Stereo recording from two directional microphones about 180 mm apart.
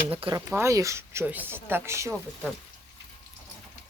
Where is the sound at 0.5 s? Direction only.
15° right (ahead or behind).